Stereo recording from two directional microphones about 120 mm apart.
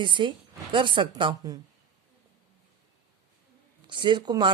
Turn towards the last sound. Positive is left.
turn(degrees=-40)  # may be behind; listen again after turning